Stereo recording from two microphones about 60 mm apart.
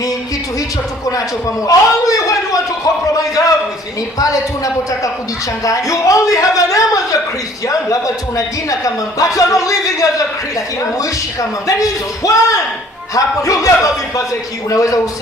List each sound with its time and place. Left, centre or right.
1.6 s a man's voice: left